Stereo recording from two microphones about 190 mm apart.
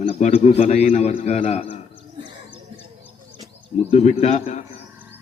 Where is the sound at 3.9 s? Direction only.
35° left (ahead or behind).